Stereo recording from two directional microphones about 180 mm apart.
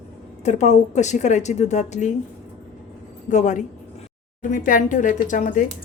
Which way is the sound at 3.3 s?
40° left (ahead or behind).